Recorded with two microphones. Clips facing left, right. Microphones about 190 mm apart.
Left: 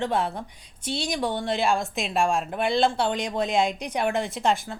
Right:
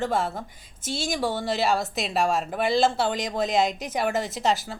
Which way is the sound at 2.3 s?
5° right (ahead or behind).